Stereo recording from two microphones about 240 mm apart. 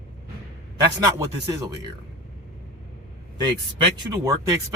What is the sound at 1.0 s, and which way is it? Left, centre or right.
Speech, centre.